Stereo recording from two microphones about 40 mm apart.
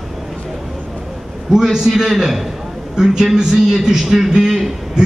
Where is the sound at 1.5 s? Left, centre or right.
Centre.